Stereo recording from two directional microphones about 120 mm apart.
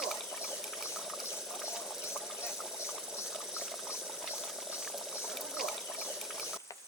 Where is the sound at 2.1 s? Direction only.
5° right (ahead or behind).